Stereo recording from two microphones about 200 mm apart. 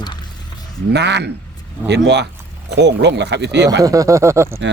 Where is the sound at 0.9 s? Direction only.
60° right (ahead or behind).